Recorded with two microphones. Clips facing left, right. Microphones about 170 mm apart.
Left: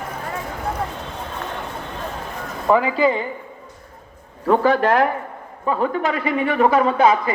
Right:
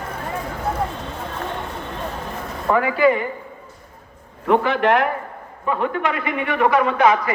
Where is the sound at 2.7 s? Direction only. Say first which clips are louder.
Even; 15° left (ahead or behind).